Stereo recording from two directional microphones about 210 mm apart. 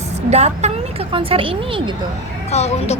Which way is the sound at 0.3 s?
30° right (ahead or behind).